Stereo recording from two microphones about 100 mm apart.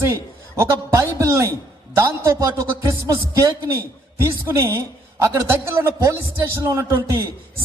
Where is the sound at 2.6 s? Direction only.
35° right (ahead or behind).